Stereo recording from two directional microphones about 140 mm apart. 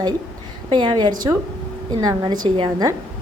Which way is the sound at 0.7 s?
35° right (ahead or behind).